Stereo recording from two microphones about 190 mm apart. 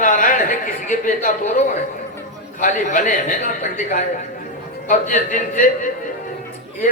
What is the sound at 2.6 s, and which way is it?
A man's voice, 40° left (ahead or behind).